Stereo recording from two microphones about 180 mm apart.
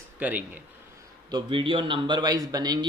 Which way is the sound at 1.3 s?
25° right (ahead or behind).